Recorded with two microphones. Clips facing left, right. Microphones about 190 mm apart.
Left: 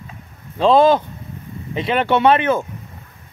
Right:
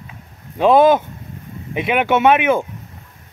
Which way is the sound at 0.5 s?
10° right (ahead or behind).